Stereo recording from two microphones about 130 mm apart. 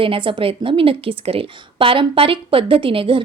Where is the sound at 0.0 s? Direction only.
45° right (ahead or behind).